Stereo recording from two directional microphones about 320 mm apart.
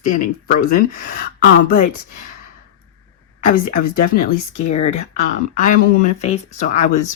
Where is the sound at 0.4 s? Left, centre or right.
Left.